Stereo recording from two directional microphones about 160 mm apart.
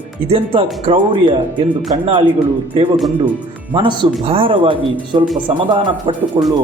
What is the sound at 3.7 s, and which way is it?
Speech, 30° right (ahead or behind).